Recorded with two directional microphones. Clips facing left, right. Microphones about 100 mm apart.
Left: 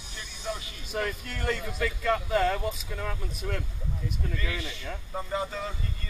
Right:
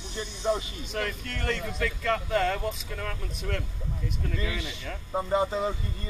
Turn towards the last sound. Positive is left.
turn(degrees=-20)  # may be behind; listen again after turning